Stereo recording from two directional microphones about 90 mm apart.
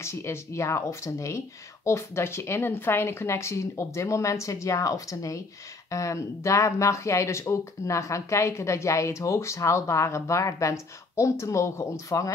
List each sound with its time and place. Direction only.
0.0 s speech: 30° left (ahead or behind)